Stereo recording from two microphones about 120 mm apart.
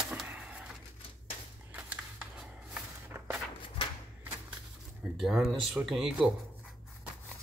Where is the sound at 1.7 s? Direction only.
10° right (ahead or behind).